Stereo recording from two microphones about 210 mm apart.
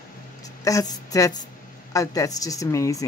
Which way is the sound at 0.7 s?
15° left (ahead or behind).